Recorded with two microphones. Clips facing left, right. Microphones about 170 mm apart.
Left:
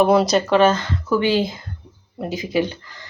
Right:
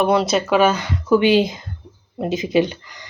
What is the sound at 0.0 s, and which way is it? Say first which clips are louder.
Speech: left 2 dB; centre (ahead or behind).